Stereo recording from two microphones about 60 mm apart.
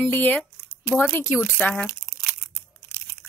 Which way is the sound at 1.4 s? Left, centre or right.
Centre.